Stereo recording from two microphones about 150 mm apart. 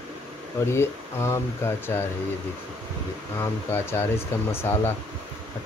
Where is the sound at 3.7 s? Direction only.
15° left (ahead or behind).